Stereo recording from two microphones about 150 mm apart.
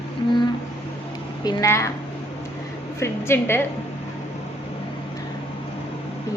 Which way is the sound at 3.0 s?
15° left (ahead or behind).